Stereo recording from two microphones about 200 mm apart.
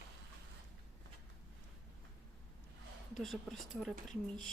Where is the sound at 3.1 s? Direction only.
Centre (ahead or behind).